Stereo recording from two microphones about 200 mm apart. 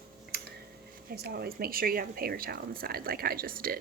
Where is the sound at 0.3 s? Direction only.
55° right (ahead or behind).